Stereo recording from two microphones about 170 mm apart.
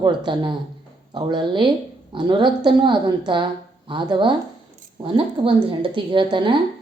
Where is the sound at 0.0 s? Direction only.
25° right (ahead or behind).